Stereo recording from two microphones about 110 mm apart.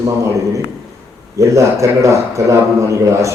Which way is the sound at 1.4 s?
30° right (ahead or behind).